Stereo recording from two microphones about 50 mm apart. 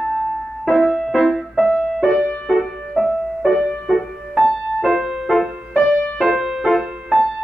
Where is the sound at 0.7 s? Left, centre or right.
Centre.